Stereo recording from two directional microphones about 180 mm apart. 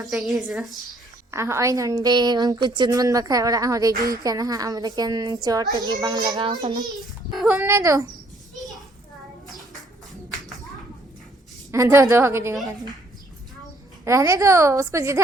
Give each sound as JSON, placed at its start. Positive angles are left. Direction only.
{"t": 0.0, "sound": "speech", "side_deg": 0}
{"t": 1.3, "sound": "a woman's voice", "side_deg": -15}
{"t": 7.3, "sound": "a woman's voice", "side_deg": -5}
{"t": 11.7, "sound": "a woman's voice", "side_deg": -15}
{"t": 14.0, "sound": "a woman's voice", "side_deg": -15}